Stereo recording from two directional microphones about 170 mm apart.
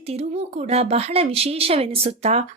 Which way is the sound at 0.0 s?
35° right (ahead or behind).